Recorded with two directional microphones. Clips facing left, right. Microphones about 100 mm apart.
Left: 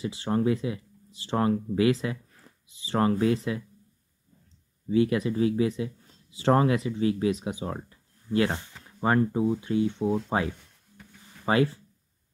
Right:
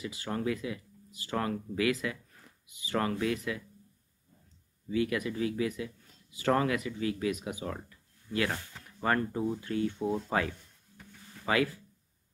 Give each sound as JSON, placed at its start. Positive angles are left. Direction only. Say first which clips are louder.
{"t": 0.0, "sound": "speech", "louder": "left 7 dB", "side_deg": 30}
{"t": 4.8, "sound": "speech", "louder": "left 7 dB", "side_deg": 30}
{"t": 11.4, "sound": "speech", "louder": "left 5 dB", "side_deg": 30}